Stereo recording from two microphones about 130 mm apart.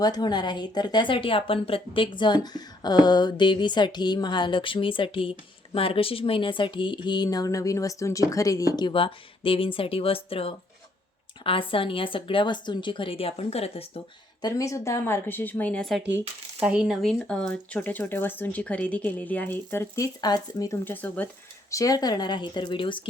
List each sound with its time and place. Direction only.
0.0 s a woman's voice: 35° left (ahead or behind); by 14.0 s 50° left (ahead or behind)
14.4 s speech: 25° left (ahead or behind)
20.2 s speech: 30° left (ahead or behind)
20.8 s speech: 15° left (ahead or behind)
21.7 s speech: 25° left (ahead or behind)